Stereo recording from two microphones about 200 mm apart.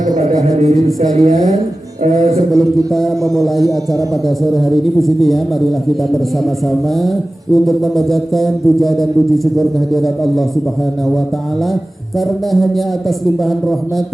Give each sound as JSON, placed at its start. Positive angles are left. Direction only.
{"t": 0.2, "sound": "a woman's voice", "side_deg": -35}
{"t": 2.5, "sound": "music", "side_deg": 0}
{"t": 4.5, "sound": "music", "side_deg": 0}
{"t": 7.5, "sound": "music", "side_deg": 0}
{"t": 12.5, "sound": "music", "side_deg": 0}